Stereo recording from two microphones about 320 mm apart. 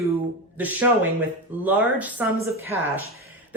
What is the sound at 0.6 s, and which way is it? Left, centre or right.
A woman's voice, centre.